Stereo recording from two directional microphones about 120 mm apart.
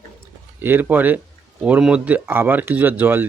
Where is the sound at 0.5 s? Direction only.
15° right (ahead or behind).